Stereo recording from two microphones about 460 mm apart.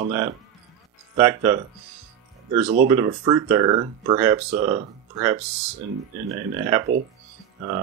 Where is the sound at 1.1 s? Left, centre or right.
Centre.